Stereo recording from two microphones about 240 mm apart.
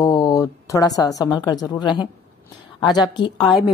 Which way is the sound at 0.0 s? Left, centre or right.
Centre.